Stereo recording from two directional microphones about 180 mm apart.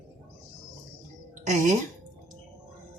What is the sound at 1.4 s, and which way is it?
Speech, 45° right (ahead or behind).